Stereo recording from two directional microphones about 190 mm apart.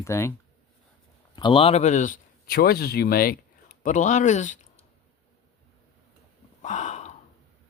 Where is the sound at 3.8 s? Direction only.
40° left (ahead or behind).